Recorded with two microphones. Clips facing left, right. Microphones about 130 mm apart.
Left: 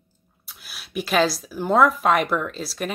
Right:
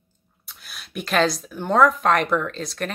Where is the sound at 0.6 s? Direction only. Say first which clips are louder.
Left 3 dB; 5° left (ahead or behind).